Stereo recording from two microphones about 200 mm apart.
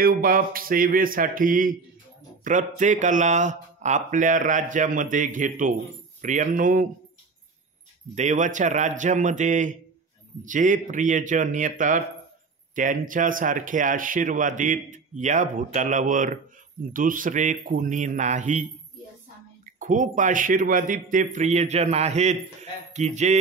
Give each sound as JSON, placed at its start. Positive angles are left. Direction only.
{"t": 0.0, "sound": "a man's voice", "side_deg": -45}
{"t": 8.1, "sound": "a man's voice", "side_deg": -35}